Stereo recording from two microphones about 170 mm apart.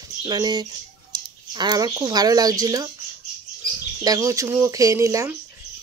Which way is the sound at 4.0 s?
20° right (ahead or behind).